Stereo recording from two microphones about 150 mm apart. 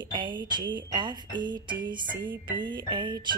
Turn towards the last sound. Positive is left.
turn(degrees=-30)  # may be behind; listen again after turning